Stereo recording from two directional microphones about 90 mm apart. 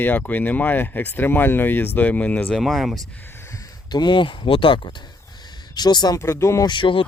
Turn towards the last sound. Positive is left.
turn(degrees=70)  # may be behind; listen again after turning